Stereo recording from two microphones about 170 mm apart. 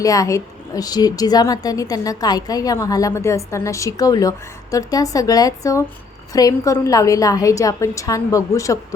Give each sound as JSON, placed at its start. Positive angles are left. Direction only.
{"t": 0.0, "sound": "a woman's voice", "side_deg": 20}